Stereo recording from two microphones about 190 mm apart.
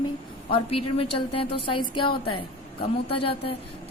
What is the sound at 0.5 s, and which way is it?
A woman's voice, 30° left (ahead or behind).